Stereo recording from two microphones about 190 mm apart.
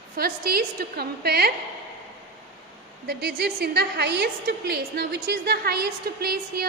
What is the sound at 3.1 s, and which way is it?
A woman's voice, 60° right (ahead or behind).